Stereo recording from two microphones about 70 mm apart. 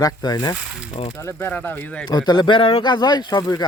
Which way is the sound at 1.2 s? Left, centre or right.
Left.